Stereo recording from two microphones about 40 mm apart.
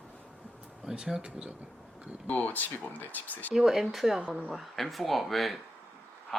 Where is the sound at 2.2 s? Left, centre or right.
Left.